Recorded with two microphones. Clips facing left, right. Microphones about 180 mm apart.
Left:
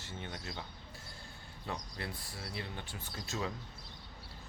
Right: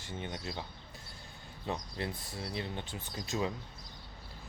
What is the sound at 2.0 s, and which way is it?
Speech, 20° right (ahead or behind).